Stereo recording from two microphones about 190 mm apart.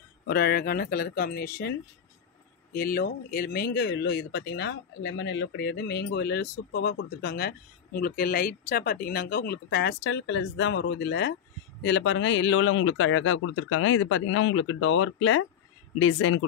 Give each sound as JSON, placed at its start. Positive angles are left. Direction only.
{"t": 0.3, "sound": "a man's voice", "side_deg": 55}